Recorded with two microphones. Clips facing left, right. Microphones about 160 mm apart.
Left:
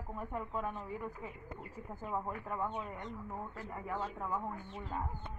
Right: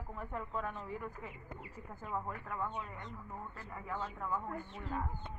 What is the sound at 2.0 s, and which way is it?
Speech, 15° left (ahead or behind).